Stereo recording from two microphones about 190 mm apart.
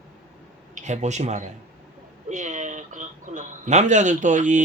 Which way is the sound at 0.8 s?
40° right (ahead or behind).